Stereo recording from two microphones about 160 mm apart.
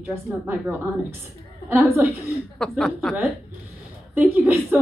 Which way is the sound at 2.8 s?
5° left (ahead or behind).